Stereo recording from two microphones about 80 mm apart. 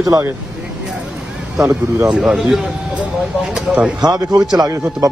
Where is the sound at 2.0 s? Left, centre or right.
Centre.